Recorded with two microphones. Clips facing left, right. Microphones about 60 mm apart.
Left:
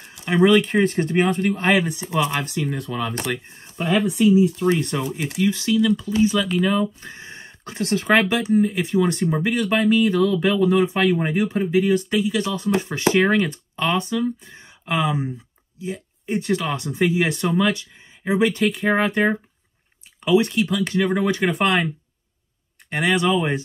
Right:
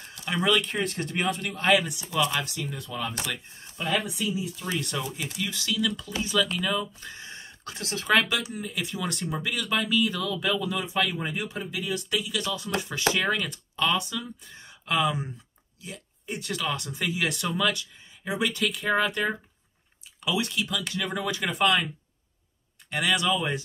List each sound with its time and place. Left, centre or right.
0.0 s a sound: centre
0.3 s speech: left
22.8 s speech: left